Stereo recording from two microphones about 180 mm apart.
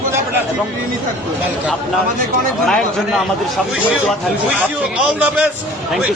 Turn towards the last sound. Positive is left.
turn(degrees=-10)  # may be behind; listen again after turning